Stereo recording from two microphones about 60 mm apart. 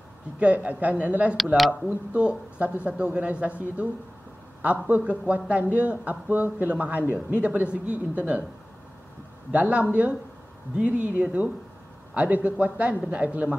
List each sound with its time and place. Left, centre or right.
0.4 s a man's voice: right
9.5 s a man's voice: right